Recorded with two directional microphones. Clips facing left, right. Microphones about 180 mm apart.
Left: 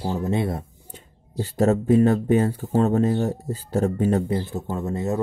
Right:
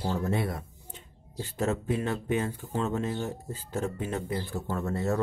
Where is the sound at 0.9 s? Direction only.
40° left (ahead or behind).